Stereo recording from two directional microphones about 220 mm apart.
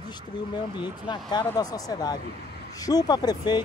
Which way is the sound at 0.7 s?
20° left (ahead or behind).